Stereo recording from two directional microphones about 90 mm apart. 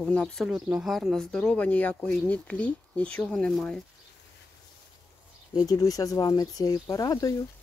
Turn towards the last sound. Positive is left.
turn(degrees=40)  # may be behind; listen again after turning